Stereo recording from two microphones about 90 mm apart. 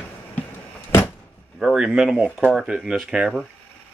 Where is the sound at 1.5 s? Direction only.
5° right (ahead or behind).